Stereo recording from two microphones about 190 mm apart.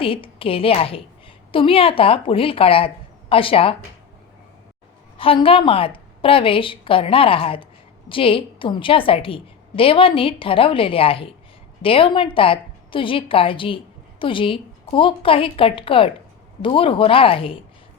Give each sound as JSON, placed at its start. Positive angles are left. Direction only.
{"t": 0.0, "sound": "a woman's voice", "side_deg": 30}
{"t": 5.1, "sound": "a woman's voice", "side_deg": 30}